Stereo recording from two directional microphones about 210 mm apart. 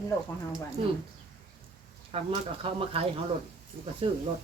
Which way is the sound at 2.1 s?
25° right (ahead or behind).